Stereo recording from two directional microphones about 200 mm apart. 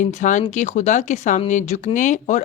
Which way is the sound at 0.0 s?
35° left (ahead or behind).